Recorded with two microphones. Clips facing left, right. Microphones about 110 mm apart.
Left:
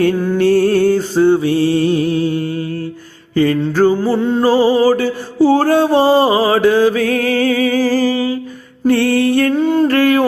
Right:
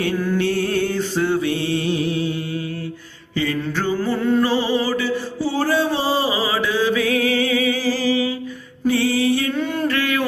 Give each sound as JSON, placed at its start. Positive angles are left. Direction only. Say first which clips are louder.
{"t": 0.3, "sound": "music", "louder": "left 10 dB", "side_deg": 40}
{"t": 3.6, "sound": "music", "louder": "left 9 dB", "side_deg": 35}
{"t": 4.4, "sound": "music", "louder": "left 9 dB", "side_deg": 40}
{"t": 8.8, "sound": "music", "louder": "left 6 dB", "side_deg": 55}
{"t": 9.5, "sound": "humming", "louder": "left 9 dB", "side_deg": 35}
{"t": 9.9, "sound": "a sound", "louder": "left 9 dB", "side_deg": 45}